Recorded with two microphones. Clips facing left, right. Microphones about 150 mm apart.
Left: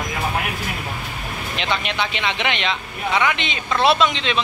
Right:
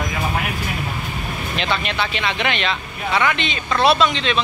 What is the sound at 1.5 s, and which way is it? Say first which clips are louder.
Speech: right 1 dB; 20° left (ahead or behind).